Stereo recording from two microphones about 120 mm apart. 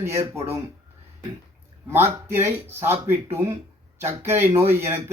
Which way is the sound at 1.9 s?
20° right (ahead or behind).